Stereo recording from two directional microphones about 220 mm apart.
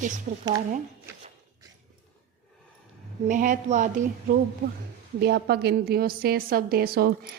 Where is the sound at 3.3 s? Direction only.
35° right (ahead or behind).